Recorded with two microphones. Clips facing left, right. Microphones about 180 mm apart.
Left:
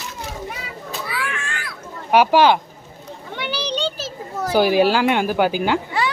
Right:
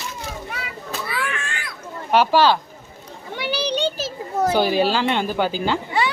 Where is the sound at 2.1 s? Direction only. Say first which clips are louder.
Left 2 dB; 15° left (ahead or behind).